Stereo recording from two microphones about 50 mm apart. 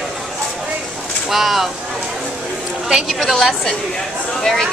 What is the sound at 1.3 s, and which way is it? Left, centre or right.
Speech, centre.